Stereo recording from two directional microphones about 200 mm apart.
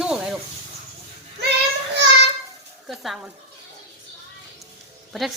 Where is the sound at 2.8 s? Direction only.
Centre (ahead or behind).